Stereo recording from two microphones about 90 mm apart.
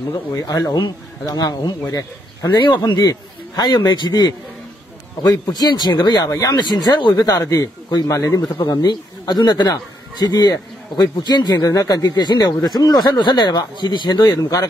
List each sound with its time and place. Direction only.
0.1 s speech: 40° left (ahead or behind)
2.6 s speech: 55° left (ahead or behind)
3.9 s a man's voice: 55° left (ahead or behind)